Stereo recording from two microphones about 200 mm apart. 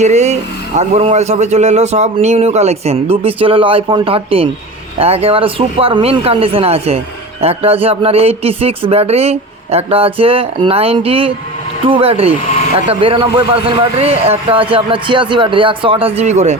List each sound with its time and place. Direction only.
0.0 s a man's voice: 35° right (ahead or behind)